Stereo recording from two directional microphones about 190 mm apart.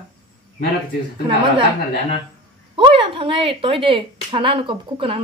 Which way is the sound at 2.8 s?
25° right (ahead or behind).